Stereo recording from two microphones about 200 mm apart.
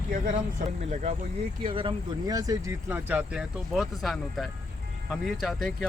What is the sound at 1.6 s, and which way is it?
Speech, 25° right (ahead or behind).